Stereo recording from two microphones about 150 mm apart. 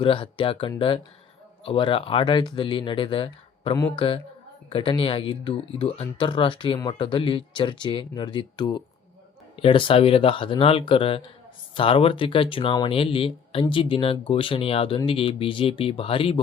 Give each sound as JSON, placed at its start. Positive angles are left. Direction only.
{"t": 0.0, "sound": "speech", "side_deg": 35}